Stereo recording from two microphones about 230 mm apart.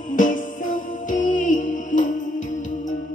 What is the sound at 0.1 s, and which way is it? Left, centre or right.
Music, left.